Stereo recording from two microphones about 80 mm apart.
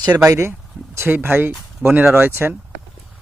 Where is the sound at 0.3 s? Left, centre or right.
Right.